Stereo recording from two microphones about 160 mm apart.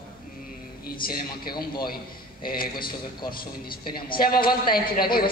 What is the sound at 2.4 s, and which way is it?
Speech, 65° left (ahead or behind).